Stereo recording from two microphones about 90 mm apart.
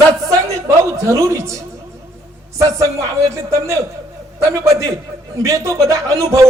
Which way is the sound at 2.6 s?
35° right (ahead or behind).